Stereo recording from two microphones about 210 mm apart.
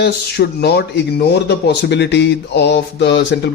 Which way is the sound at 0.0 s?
50° left (ahead or behind).